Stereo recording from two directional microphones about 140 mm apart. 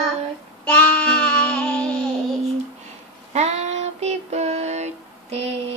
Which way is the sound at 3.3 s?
50° right (ahead or behind).